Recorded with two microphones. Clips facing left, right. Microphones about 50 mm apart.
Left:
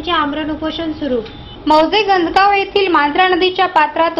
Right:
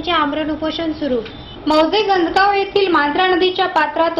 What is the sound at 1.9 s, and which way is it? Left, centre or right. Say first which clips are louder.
A woman's voice: left 2 dB; left.